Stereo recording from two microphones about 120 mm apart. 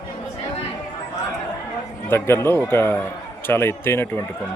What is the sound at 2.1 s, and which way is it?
A man's voice, 20° left (ahead or behind).